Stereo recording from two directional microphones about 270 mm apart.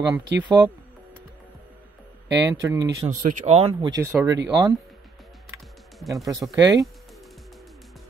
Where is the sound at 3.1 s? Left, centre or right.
Right; by 4.4 s centre.